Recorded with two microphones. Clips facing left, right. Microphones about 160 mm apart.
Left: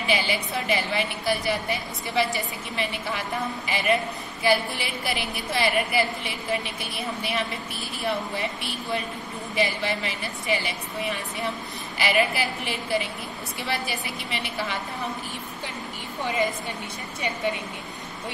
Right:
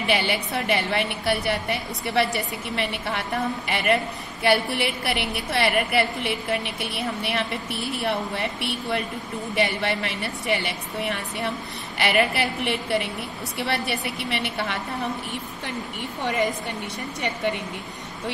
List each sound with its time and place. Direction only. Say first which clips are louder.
0.0 s a woman's voice: right 2 dB; 65° right (ahead or behind)
12.0 s a woman's voice: right 2 dB; 65° right (ahead or behind)